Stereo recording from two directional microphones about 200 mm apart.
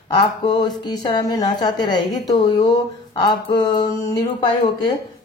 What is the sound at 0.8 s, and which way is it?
Speech, 20° left (ahead or behind).